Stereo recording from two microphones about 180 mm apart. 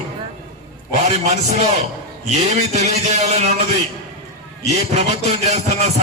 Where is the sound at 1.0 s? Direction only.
40° right (ahead or behind).